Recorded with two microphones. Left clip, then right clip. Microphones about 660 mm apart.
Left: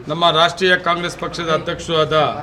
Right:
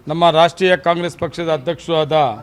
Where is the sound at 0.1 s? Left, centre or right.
Right.